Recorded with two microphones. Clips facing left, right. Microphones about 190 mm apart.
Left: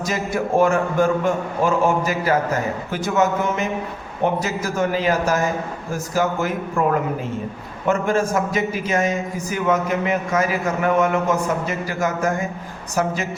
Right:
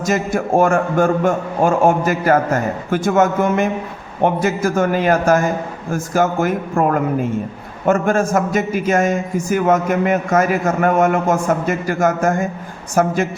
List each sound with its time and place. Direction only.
0.0 s a man's voice: 50° right (ahead or behind)
7.9 s a man's voice: 50° right (ahead or behind)